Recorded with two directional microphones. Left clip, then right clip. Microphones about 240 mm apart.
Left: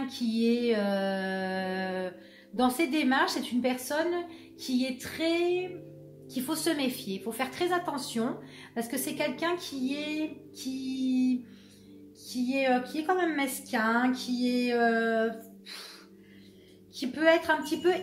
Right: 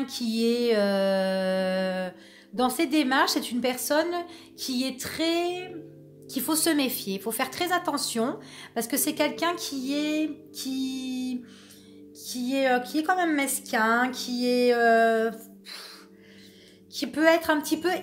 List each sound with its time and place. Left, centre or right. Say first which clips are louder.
0.0 s music: right 3 dB; right
6.3 s a woman's voice: right 5 dB; right
12.4 s a woman's voice: right 3 dB; right
16.9 s a woman's voice: right 3 dB; right